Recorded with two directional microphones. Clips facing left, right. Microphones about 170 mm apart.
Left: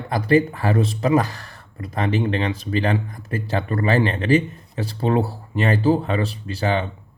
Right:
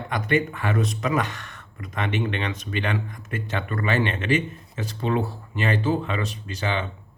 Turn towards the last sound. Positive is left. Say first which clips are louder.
# left 5 dB
turn(degrees=35)  # may be behind; listen again after turning